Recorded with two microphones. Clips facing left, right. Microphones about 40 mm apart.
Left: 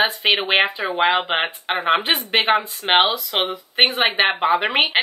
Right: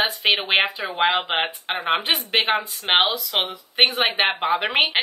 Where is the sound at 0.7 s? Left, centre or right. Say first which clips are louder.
Left 4 dB; left.